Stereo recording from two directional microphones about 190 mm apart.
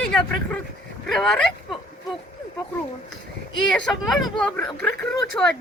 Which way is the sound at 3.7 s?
5° left (ahead or behind).